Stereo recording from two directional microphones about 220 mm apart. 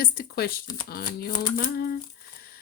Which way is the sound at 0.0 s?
45° left (ahead or behind).